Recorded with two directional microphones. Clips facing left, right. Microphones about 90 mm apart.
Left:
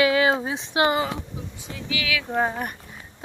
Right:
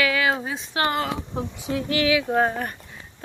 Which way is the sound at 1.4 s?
65° right (ahead or behind).